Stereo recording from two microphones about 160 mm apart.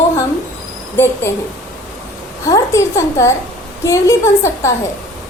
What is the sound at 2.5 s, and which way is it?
A woman's voice, 20° left (ahead or behind).